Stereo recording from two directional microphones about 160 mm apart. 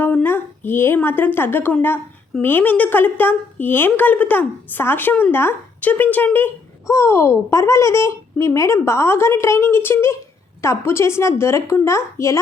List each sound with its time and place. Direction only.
0.0 s a woman's voice: 10° left (ahead or behind)